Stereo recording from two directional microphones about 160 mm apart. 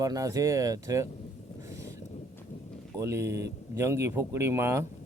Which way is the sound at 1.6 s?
20° right (ahead or behind).